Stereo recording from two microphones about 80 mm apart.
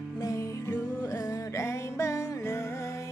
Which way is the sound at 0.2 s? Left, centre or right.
Left.